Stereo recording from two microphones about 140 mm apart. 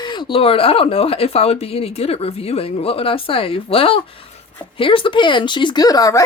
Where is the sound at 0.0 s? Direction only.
35° left (ahead or behind).